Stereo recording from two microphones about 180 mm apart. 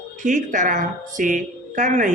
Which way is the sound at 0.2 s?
45° right (ahead or behind).